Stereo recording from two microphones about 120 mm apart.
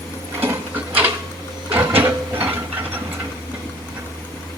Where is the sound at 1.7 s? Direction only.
15° right (ahead or behind).